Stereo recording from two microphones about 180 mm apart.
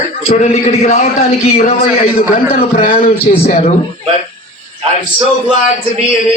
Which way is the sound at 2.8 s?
30° left (ahead or behind).